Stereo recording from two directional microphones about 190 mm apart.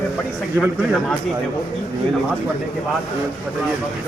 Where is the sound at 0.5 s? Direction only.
5° left (ahead or behind).